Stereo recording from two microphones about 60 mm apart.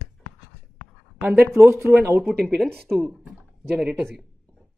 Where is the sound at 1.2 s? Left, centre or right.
Right.